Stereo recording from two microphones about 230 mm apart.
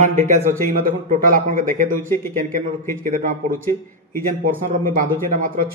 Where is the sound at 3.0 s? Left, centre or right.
Right.